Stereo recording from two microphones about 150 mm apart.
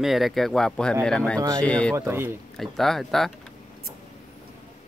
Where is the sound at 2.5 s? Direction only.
Centre (ahead or behind).